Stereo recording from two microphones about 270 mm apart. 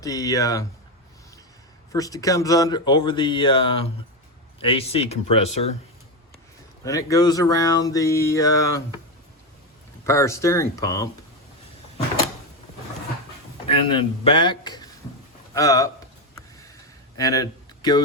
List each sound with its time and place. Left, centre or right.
0.0 s speech: centre
1.9 s speech: centre
6.8 s speech: centre
10.1 s speech: centre
13.7 s speech: centre
17.2 s speech: centre